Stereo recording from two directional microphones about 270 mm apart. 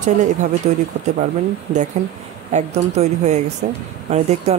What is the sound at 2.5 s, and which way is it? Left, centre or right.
Speech, right.